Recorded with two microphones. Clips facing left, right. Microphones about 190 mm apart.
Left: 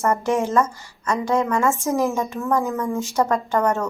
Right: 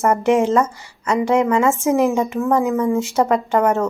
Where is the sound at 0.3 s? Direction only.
20° right (ahead or behind).